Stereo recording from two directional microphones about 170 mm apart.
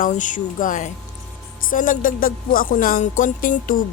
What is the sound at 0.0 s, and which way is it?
Music, 50° left (ahead or behind).